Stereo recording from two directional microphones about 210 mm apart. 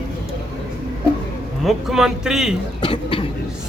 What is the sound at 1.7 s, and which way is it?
Speech, centre (ahead or behind).